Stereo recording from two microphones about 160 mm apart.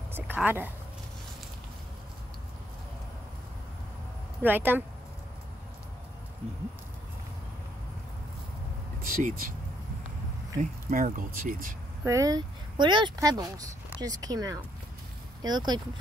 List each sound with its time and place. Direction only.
0.1 s speech: 10° right (ahead or behind)
4.4 s speech: 10° right (ahead or behind)
9.0 s speech: 60° right (ahead or behind)
10.6 s speech: 60° right (ahead or behind)
12.0 s speech: 20° right (ahead or behind)